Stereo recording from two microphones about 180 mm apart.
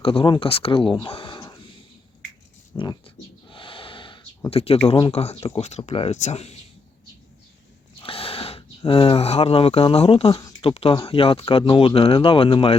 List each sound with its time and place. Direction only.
0.0 s speech: 30° left (ahead or behind)
2.7 s speech: 25° left (ahead or behind)
3.5 s a sound: 30° left (ahead or behind)
4.9 s speech: 30° left (ahead or behind)
8.0 s speech: 30° left (ahead or behind)